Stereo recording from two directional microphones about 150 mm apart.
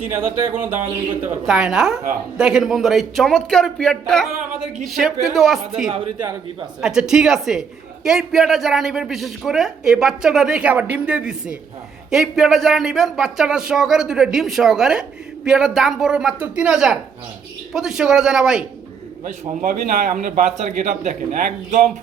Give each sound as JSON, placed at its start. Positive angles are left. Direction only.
{"t": 0.0, "sound": "speech", "side_deg": -15}
{"t": 5.9, "sound": "speech", "side_deg": -35}
{"t": 6.8, "sound": "speech", "side_deg": -5}
{"t": 19.6, "sound": "speech", "side_deg": -60}